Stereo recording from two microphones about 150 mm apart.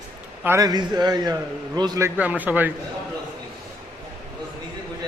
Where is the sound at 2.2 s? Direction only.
10° right (ahead or behind).